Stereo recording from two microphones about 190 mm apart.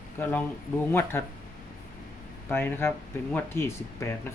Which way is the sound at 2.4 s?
10° left (ahead or behind).